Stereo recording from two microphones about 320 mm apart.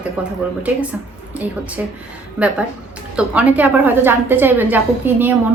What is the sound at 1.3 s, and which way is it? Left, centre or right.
Speech, centre.